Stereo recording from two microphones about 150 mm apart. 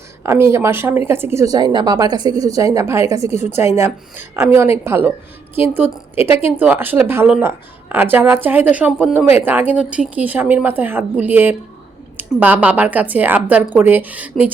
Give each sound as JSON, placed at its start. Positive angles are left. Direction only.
{"t": 0.2, "sound": "speech", "side_deg": -15}